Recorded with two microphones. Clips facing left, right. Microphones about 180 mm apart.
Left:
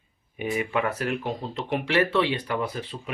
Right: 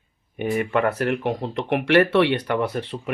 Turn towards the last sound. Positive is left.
turn(degrees=-65)  # may be behind; listen again after turning